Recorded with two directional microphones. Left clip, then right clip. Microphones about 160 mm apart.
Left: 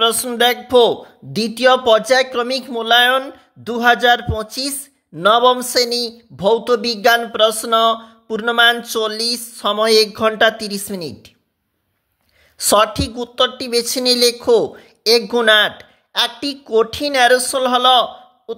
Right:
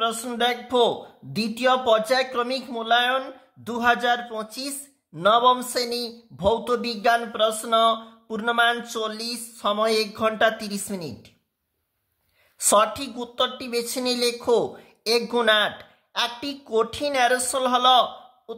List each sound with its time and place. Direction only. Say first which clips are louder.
0.0 s speech: left 9 dB; 45° left (ahead or behind)
3.6 s speech: left 8 dB; 30° left (ahead or behind)
12.5 s speech: left 6 dB; 30° left (ahead or behind)